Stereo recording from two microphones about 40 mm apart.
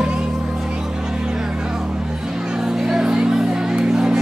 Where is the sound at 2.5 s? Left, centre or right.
Centre.